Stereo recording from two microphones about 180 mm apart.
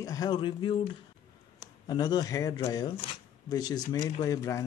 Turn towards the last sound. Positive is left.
turn(degrees=20)  # may be behind; listen again after turning